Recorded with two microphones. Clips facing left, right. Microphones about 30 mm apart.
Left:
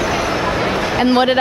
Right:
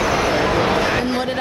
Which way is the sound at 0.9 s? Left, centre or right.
Left.